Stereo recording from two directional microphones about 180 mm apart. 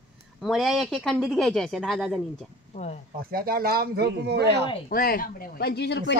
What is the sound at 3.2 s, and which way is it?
Speech, 55° right (ahead or behind).